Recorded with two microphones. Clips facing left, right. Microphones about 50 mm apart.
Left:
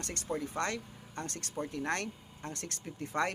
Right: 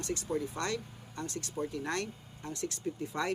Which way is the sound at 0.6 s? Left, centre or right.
Left.